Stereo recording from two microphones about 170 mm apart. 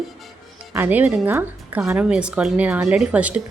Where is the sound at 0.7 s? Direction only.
10° right (ahead or behind).